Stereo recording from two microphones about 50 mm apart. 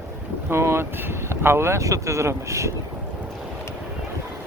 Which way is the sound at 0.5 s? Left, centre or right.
Right.